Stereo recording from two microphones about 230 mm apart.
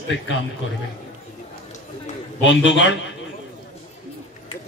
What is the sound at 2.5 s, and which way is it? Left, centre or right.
Speech, left.